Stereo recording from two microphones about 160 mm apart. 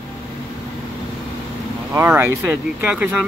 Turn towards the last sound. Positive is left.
turn(degrees=-5)  # may be behind; listen again after turning